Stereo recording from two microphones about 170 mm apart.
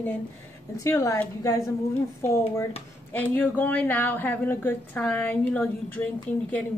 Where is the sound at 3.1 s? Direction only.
10° left (ahead or behind).